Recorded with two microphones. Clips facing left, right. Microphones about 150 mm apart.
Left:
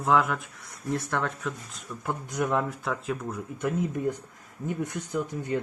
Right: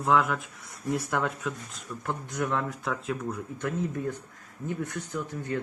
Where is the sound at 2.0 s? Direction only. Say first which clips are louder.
Left 2 dB; 10° left (ahead or behind).